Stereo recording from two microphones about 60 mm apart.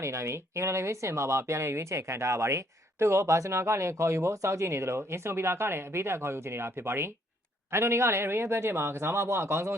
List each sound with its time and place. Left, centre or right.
0.0 s speech: right